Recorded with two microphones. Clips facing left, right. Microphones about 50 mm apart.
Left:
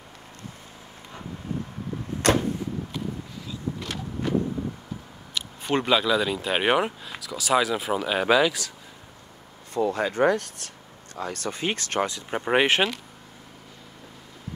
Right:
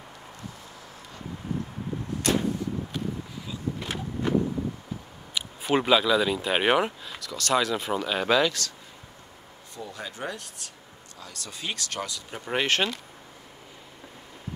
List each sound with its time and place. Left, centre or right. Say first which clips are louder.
2.2 s vehicle: left 4 dB; left
3.4 s vehicle: even; centre
5.3 s speech: right 1 dB; centre
9.8 s speech: left 14 dB; left
11.1 s speech: left 11 dB; left
12.5 s speech: left 4 dB; centre